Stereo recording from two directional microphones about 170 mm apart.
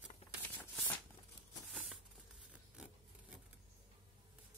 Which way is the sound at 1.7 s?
5° right (ahead or behind).